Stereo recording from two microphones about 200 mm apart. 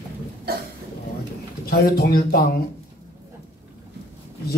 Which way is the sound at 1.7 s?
50° left (ahead or behind).